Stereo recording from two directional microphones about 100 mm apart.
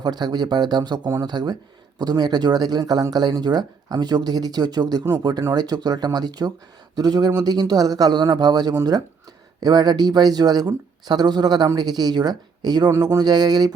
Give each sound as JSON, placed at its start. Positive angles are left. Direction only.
{"t": 0.0, "sound": "speech", "side_deg": -45}